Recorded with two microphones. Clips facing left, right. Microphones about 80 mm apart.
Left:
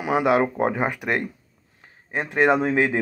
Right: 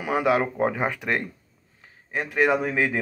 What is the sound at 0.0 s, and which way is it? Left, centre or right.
Speech, left.